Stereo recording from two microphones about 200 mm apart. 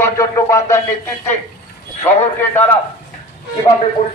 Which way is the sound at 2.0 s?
10° left (ahead or behind).